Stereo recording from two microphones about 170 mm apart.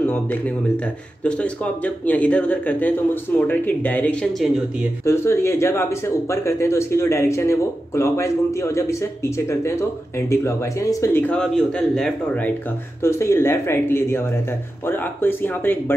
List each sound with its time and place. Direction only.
0.0 s speech: 10° left (ahead or behind)
5.0 s speech: 15° left (ahead or behind)